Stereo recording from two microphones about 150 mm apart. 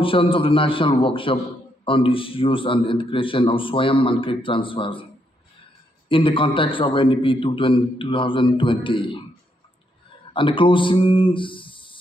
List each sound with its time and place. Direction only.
0.0 s a man's voice: 35° left (ahead or behind)
6.0 s a man's voice: 35° left (ahead or behind)
10.3 s speech: 35° left (ahead or behind)